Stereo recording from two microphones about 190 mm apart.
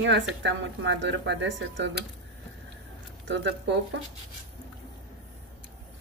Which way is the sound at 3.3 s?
70° right (ahead or behind).